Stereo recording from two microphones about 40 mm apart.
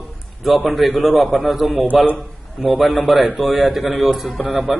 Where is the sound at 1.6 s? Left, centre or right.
Right.